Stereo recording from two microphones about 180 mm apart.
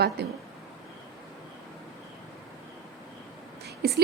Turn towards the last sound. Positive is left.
turn(degrees=-60)  # may be behind; listen again after turning